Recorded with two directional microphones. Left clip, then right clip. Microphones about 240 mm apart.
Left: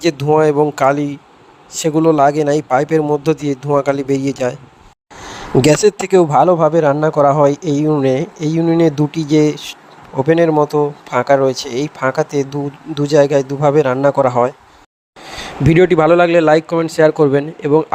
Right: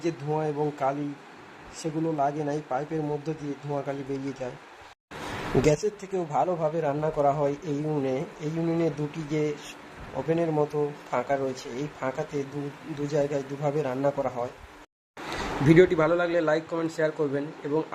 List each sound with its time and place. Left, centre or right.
0.0 s a man's voice: left
5.6 s a man's voice: left
15.7 s a man's voice: left